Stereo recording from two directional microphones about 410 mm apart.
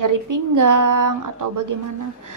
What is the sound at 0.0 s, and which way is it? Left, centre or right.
A woman's voice, right.